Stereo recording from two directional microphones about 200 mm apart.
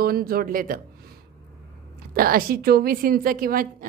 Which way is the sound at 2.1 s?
45° right (ahead or behind).